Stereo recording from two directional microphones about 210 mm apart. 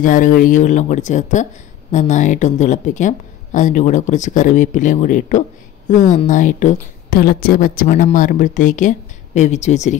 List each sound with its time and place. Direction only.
0.0 s speech: 40° left (ahead or behind)